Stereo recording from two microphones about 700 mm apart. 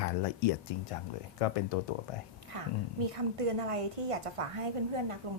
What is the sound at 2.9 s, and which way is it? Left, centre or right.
A woman's voice, right.